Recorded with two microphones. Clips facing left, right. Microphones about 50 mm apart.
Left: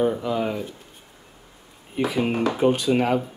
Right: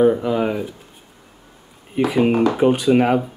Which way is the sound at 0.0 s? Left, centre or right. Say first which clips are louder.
Right 6 dB; right.